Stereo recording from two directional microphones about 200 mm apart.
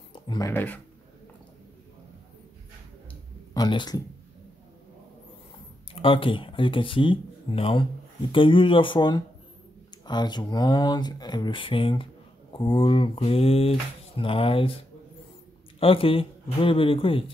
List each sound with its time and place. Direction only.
0.1 s a sound: 25° left (ahead or behind)
0.5 s speech: 10° left (ahead or behind)
3.5 s speech: 20° left (ahead or behind)
5.9 s speech: 25° left (ahead or behind)
15.8 s speech: 25° left (ahead or behind)